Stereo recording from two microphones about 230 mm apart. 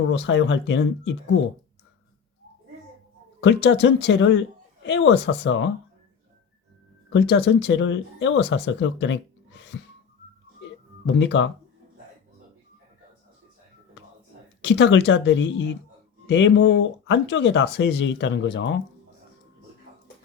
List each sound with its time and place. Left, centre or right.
0.1 s speech: left
3.4 s speech: left
7.1 s speech: left
11.0 s speech: left
14.6 s speech: left